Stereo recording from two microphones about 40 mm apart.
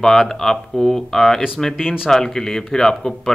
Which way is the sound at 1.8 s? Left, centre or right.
Centre.